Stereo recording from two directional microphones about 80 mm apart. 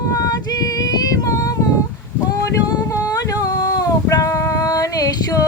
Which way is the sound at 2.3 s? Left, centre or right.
Left.